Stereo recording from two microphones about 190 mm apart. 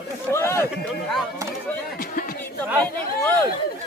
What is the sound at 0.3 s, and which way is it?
Chatter, 15° left (ahead or behind).